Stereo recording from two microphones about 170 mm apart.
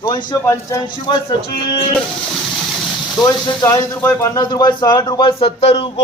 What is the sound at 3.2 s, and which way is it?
Speech, 25° left (ahead or behind).